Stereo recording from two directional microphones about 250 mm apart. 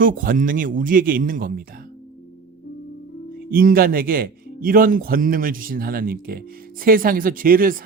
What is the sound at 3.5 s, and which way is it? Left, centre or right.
Speech, right.